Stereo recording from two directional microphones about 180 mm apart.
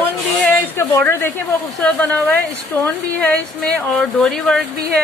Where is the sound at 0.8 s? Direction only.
15° left (ahead or behind).